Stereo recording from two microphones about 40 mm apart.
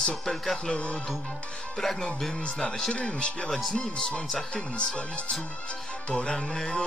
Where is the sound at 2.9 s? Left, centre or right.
Left.